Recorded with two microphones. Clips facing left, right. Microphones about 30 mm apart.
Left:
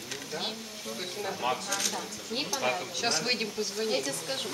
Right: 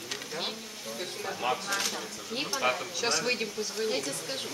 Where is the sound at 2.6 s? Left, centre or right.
Centre.